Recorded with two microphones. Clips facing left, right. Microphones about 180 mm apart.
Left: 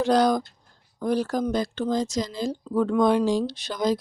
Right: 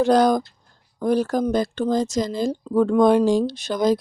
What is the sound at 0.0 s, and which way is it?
Speech, 50° right (ahead or behind).